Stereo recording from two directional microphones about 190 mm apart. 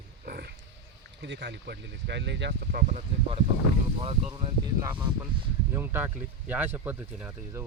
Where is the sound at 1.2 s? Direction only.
65° right (ahead or behind).